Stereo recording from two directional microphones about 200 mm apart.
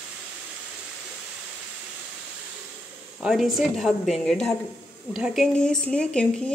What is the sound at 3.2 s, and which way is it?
A woman's voice, 5° right (ahead or behind).